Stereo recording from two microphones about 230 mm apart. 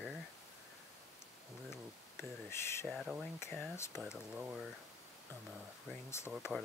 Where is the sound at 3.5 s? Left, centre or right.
Centre.